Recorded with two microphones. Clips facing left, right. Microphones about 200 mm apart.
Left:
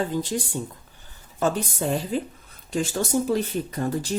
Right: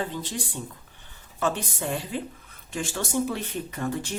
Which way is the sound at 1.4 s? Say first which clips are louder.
Left 4 dB; 40° left (ahead or behind).